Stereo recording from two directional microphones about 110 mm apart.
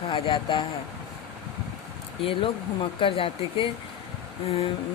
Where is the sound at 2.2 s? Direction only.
55° left (ahead or behind).